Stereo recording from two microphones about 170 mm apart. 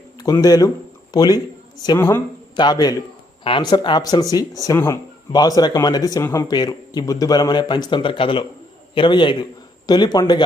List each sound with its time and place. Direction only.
0.2 s a man's voice: 20° left (ahead or behind)